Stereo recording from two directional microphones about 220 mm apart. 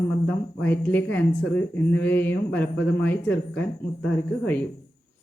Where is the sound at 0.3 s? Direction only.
10° left (ahead or behind).